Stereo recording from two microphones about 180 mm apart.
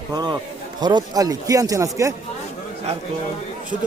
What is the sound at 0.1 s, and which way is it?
Speech, 25° right (ahead or behind).